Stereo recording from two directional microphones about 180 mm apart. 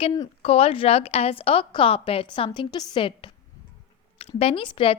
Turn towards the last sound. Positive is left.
turn(degrees=30)  # may be behind; listen again after turning